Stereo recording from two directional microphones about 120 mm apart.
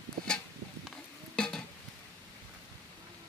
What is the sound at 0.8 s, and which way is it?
Music, 5° left (ahead or behind).